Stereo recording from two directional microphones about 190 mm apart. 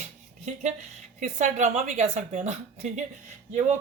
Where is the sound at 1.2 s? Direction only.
40° right (ahead or behind).